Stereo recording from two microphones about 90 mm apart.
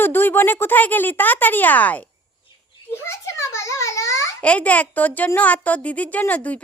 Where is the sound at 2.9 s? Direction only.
30° left (ahead or behind).